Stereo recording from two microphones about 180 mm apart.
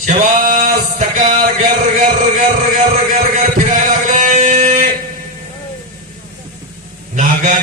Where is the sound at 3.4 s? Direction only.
45° right (ahead or behind).